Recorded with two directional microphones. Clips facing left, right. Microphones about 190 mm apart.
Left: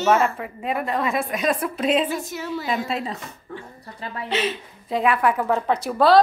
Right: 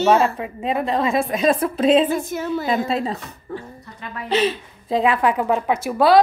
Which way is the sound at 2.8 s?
35° right (ahead or behind).